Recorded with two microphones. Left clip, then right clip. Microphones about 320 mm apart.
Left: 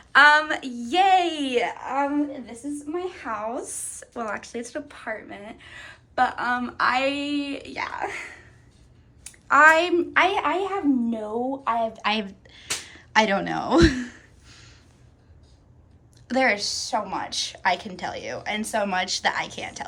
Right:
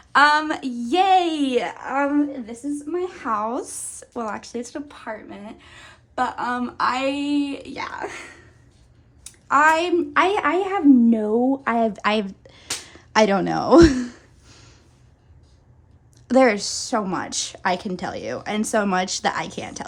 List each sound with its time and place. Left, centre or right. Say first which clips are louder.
0.1 s speech: left 1 dB; centre
3.2 s a woman's voice: right 5 dB; centre
12.4 s a sound: even; right
16.2 s a woman's voice: right 5 dB; right